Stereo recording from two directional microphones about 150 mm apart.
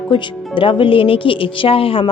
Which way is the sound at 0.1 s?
35° left (ahead or behind).